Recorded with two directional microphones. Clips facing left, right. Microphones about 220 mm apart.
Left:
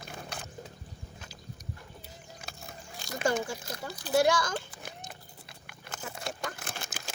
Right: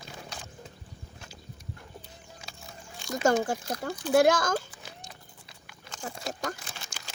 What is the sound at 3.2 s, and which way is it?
Speech, 50° right (ahead or behind).